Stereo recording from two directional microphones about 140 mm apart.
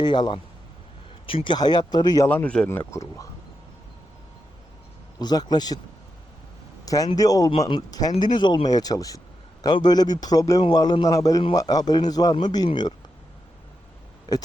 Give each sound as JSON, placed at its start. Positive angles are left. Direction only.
{"t": 0.0, "sound": "speech", "side_deg": 35}
{"t": 2.3, "sound": "a man's voice", "side_deg": 10}
{"t": 5.2, "sound": "a man's voice", "side_deg": 30}
{"t": 6.8, "sound": "a man's voice", "side_deg": 25}
{"t": 14.3, "sound": "a man's voice", "side_deg": 30}